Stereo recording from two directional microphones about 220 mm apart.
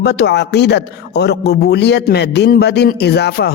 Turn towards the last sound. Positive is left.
turn(degrees=45)  # may be behind; listen again after turning